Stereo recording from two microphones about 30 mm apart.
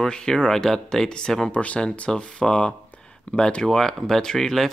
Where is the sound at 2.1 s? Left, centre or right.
Left.